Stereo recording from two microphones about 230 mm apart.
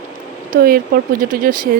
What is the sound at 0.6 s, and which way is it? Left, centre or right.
Speech, right.